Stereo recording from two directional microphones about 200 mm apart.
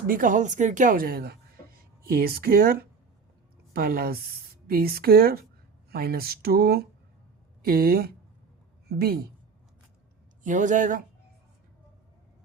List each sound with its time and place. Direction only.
0.1 s a woman's voice: 40° right (ahead or behind)
10.4 s a woman's voice: 40° right (ahead or behind)